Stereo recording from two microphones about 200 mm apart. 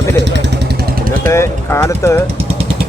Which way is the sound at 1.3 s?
15° left (ahead or behind).